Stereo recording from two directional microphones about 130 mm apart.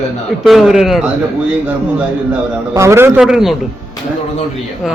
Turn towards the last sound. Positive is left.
turn(degrees=-5)  # may be behind; listen again after turning